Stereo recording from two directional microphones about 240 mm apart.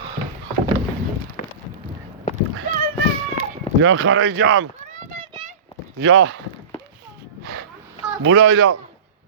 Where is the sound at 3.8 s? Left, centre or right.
Right.